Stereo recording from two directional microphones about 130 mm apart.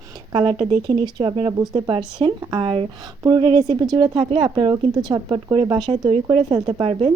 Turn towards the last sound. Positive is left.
turn(degrees=-45)  # may be behind; listen again after turning